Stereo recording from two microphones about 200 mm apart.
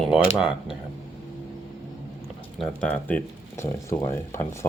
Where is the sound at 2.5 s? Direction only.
5° left (ahead or behind).